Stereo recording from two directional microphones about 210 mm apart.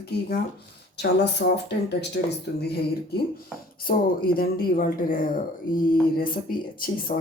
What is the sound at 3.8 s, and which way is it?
A woman's voice, 45° left (ahead or behind).